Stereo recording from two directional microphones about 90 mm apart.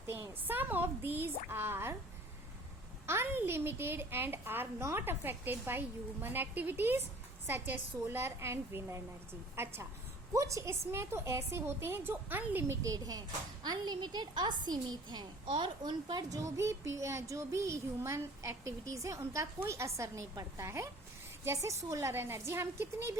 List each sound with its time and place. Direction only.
0.1 s a woman's voice: 25° right (ahead or behind)
3.1 s a woman's voice: 25° right (ahead or behind)
12.9 s speech: 45° right (ahead or behind)
16.4 s speech: 35° right (ahead or behind)